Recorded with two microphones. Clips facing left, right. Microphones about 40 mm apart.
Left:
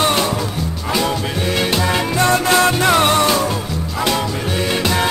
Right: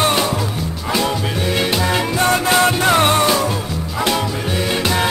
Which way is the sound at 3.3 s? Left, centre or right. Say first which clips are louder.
Even; centre.